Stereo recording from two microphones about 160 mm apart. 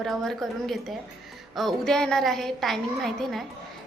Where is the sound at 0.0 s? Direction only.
Centre (ahead or behind).